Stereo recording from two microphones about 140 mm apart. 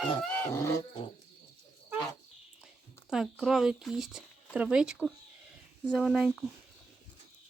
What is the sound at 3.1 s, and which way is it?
Speech, 5° right (ahead or behind).